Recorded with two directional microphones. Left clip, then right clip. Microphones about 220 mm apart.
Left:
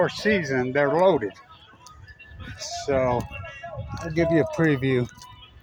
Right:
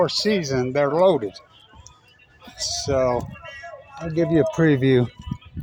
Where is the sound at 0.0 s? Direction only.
30° right (ahead or behind).